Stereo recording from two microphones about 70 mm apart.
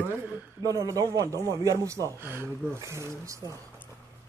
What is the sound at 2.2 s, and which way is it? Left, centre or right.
Speech, right.